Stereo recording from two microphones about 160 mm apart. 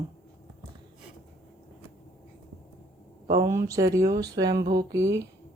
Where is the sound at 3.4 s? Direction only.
20° right (ahead or behind).